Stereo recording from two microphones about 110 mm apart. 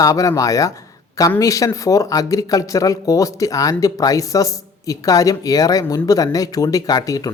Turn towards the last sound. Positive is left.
turn(degrees=35)  # may be behind; listen again after turning